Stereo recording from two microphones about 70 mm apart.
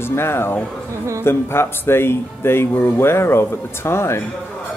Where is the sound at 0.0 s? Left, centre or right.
Left.